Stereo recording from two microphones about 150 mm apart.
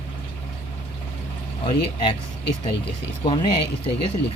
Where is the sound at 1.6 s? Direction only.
35° left (ahead or behind).